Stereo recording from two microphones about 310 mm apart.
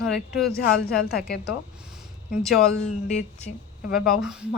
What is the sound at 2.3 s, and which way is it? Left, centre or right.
Speech, centre.